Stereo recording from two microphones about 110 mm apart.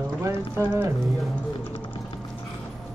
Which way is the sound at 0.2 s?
25° right (ahead or behind).